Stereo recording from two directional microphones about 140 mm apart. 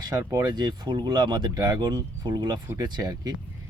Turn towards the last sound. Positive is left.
turn(degrees=-30)  # may be behind; listen again after turning